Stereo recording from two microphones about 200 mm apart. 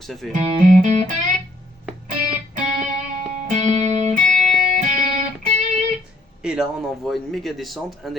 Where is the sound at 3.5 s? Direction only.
35° right (ahead or behind).